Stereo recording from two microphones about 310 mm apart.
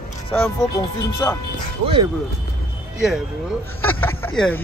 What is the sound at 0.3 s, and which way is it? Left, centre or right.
Speech, centre.